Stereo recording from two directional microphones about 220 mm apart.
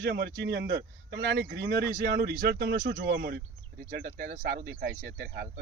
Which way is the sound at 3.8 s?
35° right (ahead or behind).